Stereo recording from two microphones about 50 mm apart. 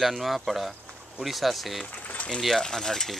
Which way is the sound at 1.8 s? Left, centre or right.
Left.